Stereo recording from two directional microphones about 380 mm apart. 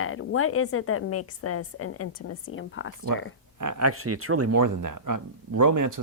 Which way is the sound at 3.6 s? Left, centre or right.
Right.